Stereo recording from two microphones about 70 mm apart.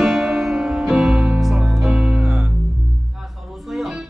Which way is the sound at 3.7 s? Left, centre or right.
Centre.